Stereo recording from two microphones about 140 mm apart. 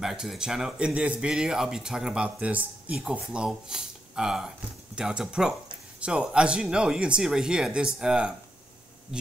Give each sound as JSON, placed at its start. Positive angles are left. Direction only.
{"t": 0.0, "sound": "speech", "side_deg": 0}